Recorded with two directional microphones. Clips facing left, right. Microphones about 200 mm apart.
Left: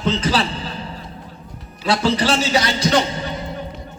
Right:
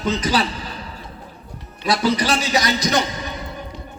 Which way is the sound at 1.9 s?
25° left (ahead or behind).